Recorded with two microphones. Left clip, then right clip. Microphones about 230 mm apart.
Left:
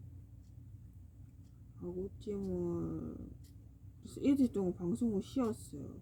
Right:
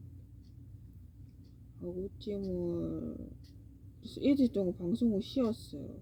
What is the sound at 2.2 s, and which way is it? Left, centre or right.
Speech, centre.